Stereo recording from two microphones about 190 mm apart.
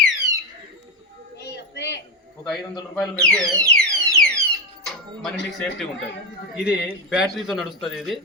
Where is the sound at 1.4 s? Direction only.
65° left (ahead or behind).